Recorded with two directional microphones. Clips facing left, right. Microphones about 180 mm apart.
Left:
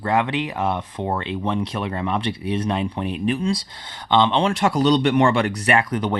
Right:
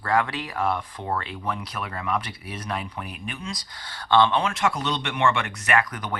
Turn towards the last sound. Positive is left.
turn(degrees=30)  # may be behind; listen again after turning